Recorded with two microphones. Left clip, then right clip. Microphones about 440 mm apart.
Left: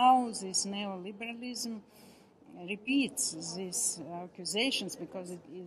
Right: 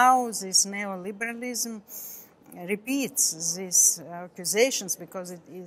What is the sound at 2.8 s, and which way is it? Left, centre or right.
Speech, right.